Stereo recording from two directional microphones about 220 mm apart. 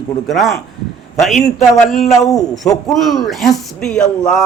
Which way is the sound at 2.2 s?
15° left (ahead or behind).